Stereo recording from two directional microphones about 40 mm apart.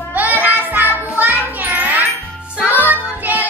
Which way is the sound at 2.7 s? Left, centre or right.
Left.